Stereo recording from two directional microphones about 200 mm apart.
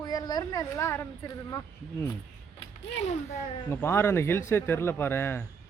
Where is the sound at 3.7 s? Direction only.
10° left (ahead or behind).